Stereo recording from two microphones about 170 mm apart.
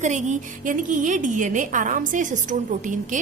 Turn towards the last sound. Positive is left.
turn(degrees=-50)  # may be behind; listen again after turning